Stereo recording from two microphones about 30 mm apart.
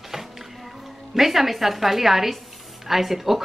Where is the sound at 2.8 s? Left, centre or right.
Centre.